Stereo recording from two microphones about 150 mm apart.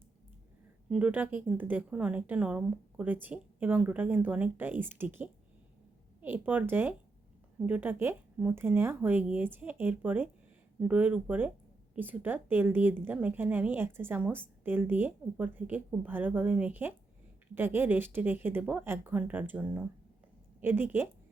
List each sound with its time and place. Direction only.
0.9 s a woman's voice: 10° right (ahead or behind)